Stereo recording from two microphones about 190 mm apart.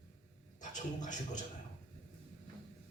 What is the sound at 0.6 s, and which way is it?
Speech, 40° left (ahead or behind).